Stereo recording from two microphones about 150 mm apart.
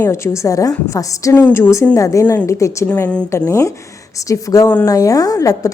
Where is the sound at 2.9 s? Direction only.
5° left (ahead or behind).